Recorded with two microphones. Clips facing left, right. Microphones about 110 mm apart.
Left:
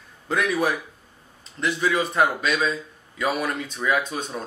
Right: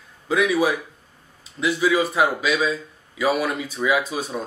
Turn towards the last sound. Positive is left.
turn(degrees=-5)  # may be behind; listen again after turning